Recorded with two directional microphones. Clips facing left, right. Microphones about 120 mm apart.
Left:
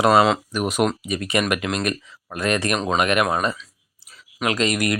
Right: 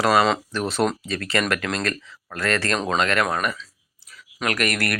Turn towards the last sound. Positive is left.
turn(degrees=20)  # may be behind; listen again after turning